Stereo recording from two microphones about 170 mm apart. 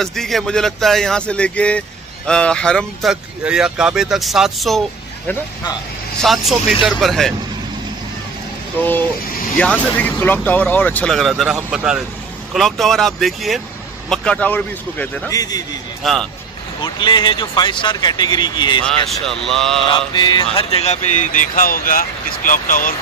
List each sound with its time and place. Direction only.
0.0 s speech: centre (ahead or behind)
6.2 s speech: centre (ahead or behind)
9.9 s speech: 10° left (ahead or behind)
15.3 s speech: 20° left (ahead or behind)
16.0 s speech: centre (ahead or behind)
16.8 s speech: 30° left (ahead or behind)
19.0 s speech: centre (ahead or behind)
19.9 s speech: 30° left (ahead or behind); by 22.9 s 55° left (ahead or behind)